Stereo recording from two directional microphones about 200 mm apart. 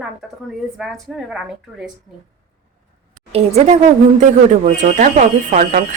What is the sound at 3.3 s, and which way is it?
A woman's voice, 30° right (ahead or behind).